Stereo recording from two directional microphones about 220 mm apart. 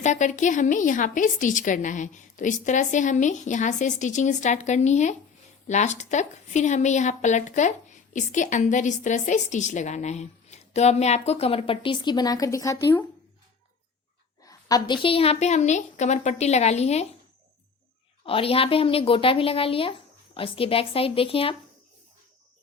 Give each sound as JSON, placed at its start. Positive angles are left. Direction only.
{"t": 0.0, "sound": "a woman's voice", "side_deg": 35}
{"t": 14.4, "sound": "a sound", "side_deg": 15}
{"t": 15.0, "sound": "a woman's voice", "side_deg": 25}
{"t": 18.3, "sound": "a woman's voice", "side_deg": 25}